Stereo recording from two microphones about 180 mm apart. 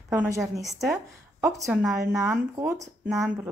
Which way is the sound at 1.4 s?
15° right (ahead or behind).